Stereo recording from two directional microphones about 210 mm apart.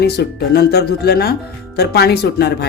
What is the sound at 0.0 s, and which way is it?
Speech, 50° left (ahead or behind).